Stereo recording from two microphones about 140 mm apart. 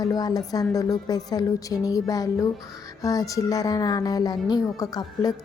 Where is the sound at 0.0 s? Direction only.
30° left (ahead or behind).